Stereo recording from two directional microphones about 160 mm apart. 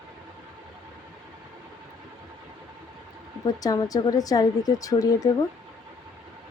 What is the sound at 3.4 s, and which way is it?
A woman's voice, 20° left (ahead or behind).